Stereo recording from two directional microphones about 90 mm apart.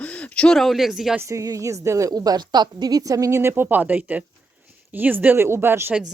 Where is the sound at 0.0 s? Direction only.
15° left (ahead or behind); by 1.1 s 5° right (ahead or behind).